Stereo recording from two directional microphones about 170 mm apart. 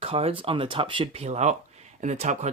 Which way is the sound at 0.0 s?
35° right (ahead or behind).